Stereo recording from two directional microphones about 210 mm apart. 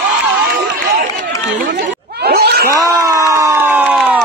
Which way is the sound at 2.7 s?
15° right (ahead or behind).